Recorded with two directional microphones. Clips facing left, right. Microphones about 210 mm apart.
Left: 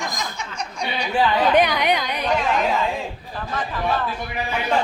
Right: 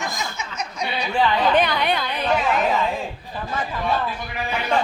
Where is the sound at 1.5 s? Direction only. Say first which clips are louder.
Left 2 dB; 15° left (ahead or behind).